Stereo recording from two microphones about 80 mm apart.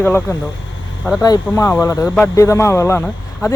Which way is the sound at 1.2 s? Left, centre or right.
Left.